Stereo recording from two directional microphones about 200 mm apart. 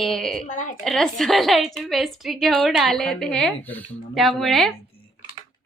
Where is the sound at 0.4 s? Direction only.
40° left (ahead or behind).